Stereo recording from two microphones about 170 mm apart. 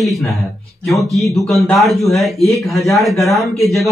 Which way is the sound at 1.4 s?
Centre (ahead or behind).